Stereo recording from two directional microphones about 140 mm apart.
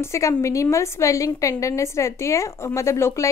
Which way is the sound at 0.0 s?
20° left (ahead or behind).